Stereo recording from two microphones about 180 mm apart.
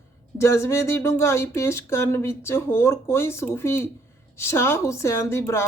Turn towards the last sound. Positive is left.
turn(degrees=15)  # may be behind; listen again after turning